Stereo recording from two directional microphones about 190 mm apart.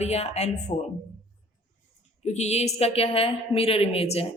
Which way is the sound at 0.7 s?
25° left (ahead or behind).